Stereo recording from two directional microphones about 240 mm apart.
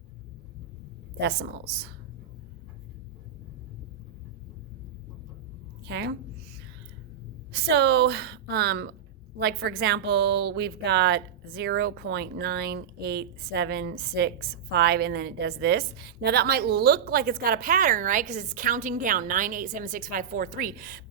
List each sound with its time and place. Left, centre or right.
1.2 s a woman's voice: right
5.9 s a woman's voice: right
7.5 s a woman's voice: right